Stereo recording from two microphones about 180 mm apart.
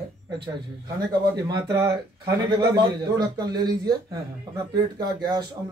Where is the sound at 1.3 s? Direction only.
20° right (ahead or behind).